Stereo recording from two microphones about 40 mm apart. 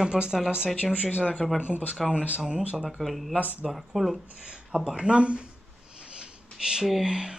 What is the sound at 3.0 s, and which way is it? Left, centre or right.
Speech, centre.